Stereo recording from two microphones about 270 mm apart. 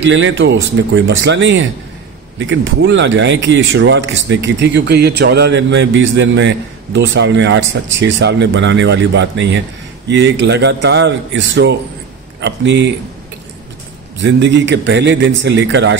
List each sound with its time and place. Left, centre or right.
0.0 s a man's voice: right
14.1 s speech: right